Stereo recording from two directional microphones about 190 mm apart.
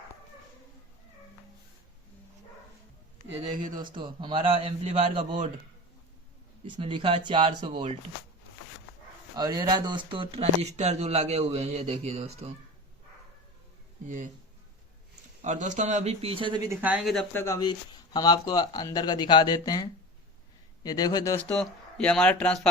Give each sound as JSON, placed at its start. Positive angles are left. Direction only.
{"t": 3.8, "sound": "a man's voice", "side_deg": -25}
{"t": 6.7, "sound": "a man's voice", "side_deg": -25}
{"t": 9.3, "sound": "speech", "side_deg": -20}
{"t": 15.4, "sound": "speech", "side_deg": -40}
{"t": 16.6, "sound": "speech", "side_deg": -10}
{"t": 17.3, "sound": "speech", "side_deg": 15}
{"t": 21.4, "sound": "speech", "side_deg": 5}